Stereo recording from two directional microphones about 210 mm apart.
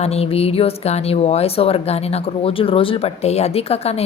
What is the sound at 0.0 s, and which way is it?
Speech, 30° left (ahead or behind).